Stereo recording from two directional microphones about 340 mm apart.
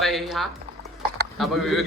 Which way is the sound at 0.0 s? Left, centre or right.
Centre.